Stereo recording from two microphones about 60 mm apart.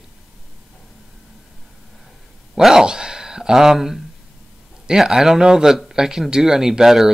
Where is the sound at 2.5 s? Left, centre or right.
Centre.